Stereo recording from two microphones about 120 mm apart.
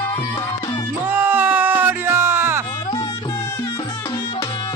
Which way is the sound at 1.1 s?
15° right (ahead or behind).